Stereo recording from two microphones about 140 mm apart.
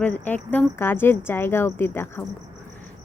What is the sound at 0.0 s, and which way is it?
Speech, 10° left (ahead or behind).